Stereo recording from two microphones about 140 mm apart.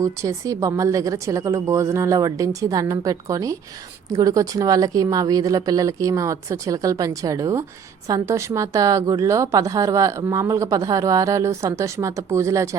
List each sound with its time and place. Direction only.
0.0 s a woman's voice: 20° right (ahead or behind)